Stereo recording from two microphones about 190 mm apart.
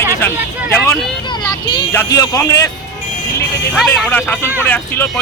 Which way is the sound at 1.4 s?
20° left (ahead or behind).